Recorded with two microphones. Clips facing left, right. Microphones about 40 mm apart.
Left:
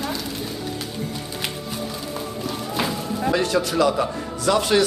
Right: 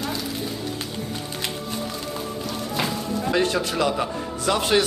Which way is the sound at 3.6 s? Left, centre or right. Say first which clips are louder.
Left 3 dB; centre.